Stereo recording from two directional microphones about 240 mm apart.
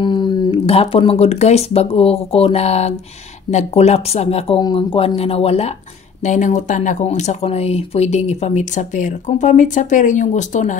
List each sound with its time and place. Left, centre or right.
0.0 s speech: centre